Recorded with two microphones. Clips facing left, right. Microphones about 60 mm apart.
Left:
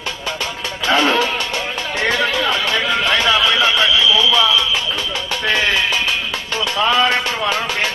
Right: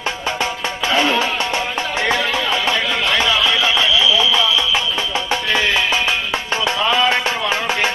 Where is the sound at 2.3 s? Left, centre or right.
Right.